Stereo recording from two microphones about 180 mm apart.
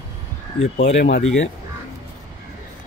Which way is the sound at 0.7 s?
75° left (ahead or behind).